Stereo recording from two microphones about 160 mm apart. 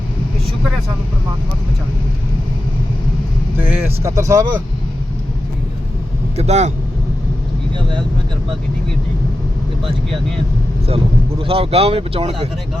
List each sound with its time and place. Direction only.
3.6 s speech: 10° right (ahead or behind)
6.3 s speech: 40° right (ahead or behind)
10.8 s speech: 35° right (ahead or behind)